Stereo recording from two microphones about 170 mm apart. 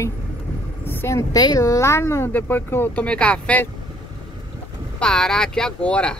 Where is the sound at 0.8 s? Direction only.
15° left (ahead or behind).